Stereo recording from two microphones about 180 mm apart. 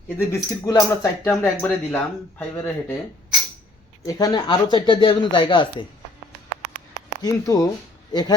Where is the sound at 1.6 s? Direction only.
5° left (ahead or behind).